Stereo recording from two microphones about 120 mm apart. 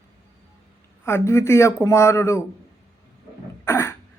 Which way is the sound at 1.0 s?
25° left (ahead or behind).